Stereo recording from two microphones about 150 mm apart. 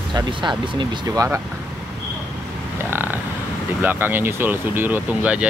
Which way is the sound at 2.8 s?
15° right (ahead or behind).